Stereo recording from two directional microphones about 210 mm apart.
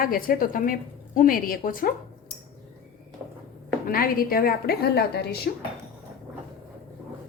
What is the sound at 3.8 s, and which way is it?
A woman's voice, 45° left (ahead or behind).